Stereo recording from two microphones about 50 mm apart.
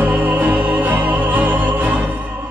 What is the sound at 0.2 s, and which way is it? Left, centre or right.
Music, right.